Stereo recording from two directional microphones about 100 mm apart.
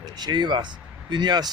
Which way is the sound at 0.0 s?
45° right (ahead or behind).